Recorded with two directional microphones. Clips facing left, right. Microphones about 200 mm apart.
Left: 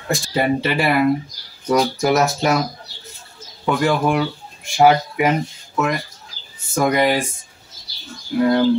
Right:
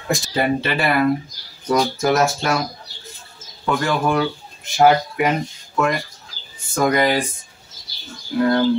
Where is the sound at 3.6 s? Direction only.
10° left (ahead or behind).